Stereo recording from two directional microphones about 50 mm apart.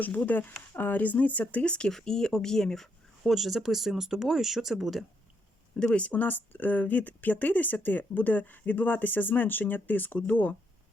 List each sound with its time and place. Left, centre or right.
0.0 s speech: left
1.9 s speech: centre
5.7 s speech: centre